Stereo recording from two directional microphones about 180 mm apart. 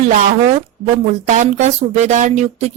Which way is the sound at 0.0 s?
45° right (ahead or behind).